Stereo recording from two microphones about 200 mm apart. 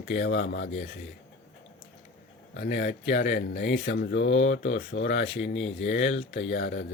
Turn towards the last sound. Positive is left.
turn(degrees=60)  # may be behind; listen again after turning